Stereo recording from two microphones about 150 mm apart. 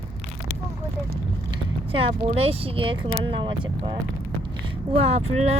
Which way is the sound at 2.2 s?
40° right (ahead or behind).